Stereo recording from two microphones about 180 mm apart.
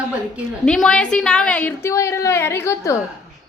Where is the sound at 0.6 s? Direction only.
5° left (ahead or behind).